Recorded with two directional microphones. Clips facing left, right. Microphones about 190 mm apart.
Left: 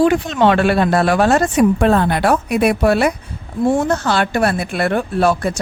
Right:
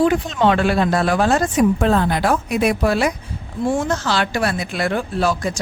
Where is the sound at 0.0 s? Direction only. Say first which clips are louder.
Left 3 dB; 70° left (ahead or behind).